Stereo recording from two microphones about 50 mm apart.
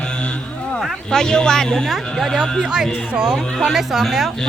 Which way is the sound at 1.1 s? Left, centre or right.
Centre.